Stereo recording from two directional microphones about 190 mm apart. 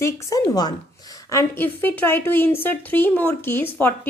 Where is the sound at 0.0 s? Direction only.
15° left (ahead or behind).